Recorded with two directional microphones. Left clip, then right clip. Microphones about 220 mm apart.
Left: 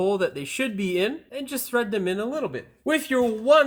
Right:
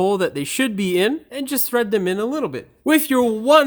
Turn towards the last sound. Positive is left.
turn(degrees=-55)  # may be behind; listen again after turning